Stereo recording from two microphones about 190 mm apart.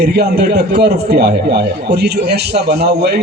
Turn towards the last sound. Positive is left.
turn(degrees=-60)  # may be behind; listen again after turning